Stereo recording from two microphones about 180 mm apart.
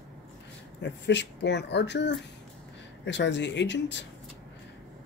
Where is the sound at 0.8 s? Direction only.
80° left.